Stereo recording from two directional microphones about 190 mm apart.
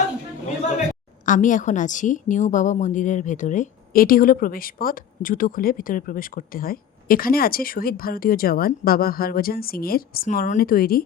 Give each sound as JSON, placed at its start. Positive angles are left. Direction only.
{"t": 1.2, "sound": "a woman's voice", "side_deg": 40}